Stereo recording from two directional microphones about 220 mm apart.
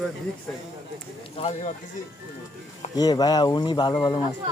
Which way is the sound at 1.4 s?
30° left (ahead or behind).